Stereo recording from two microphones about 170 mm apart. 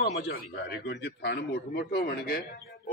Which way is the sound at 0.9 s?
80° left.